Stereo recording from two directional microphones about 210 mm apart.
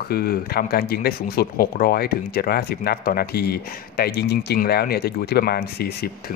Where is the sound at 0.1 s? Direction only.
45° left (ahead or behind).